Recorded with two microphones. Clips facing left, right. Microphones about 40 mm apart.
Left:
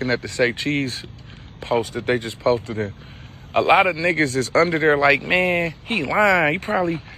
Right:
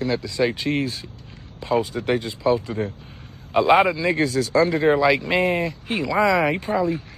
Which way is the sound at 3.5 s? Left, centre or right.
Left.